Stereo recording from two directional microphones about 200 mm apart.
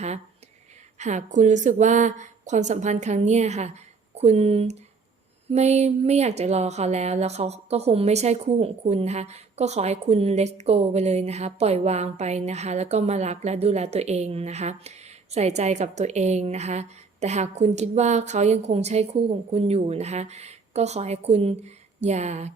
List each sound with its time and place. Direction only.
0.9 s a woman's voice: 35° right (ahead or behind)